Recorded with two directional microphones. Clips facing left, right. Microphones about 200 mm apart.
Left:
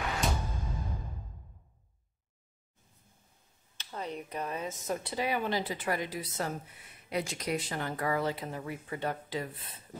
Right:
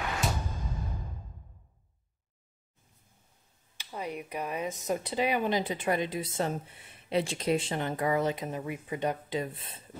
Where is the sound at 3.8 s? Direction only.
10° right (ahead or behind).